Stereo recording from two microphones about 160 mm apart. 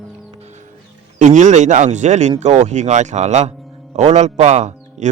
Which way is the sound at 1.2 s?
50° right (ahead or behind).